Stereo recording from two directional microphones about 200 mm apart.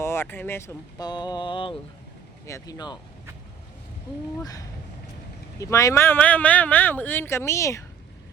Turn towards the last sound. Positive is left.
turn(degrees=15)  # may be behind; listen again after turning